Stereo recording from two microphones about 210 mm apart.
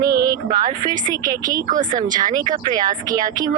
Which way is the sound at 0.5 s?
40° right (ahead or behind).